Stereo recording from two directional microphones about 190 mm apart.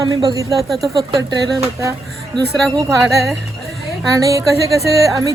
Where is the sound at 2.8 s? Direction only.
15° right (ahead or behind).